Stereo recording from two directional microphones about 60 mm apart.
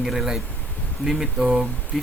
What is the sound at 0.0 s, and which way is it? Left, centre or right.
Speech, centre.